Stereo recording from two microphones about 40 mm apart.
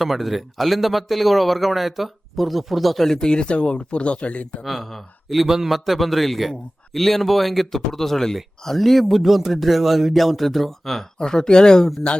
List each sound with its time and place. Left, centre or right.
0.0 s speech: centre; by 4.4 s left
4.6 s speech: centre
11.2 s speech: centre